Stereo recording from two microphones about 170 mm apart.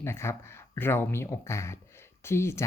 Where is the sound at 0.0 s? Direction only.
15° left (ahead or behind).